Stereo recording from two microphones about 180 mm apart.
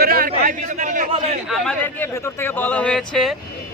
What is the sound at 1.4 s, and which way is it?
Speech, centre (ahead or behind).